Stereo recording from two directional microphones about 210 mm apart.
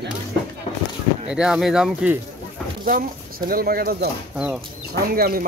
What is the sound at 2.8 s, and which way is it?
Speech, 45° right (ahead or behind).